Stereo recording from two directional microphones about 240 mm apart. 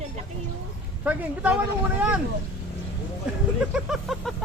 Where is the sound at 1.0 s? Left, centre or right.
Centre.